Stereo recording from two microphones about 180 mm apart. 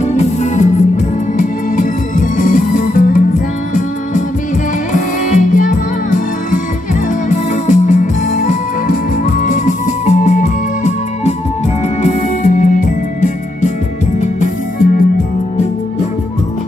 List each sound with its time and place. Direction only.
0.0 s music: 40° left (ahead or behind)